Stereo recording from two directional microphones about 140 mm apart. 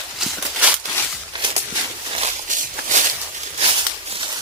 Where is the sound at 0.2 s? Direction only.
10° right (ahead or behind).